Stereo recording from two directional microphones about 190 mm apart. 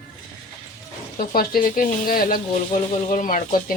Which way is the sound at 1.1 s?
50° left (ahead or behind).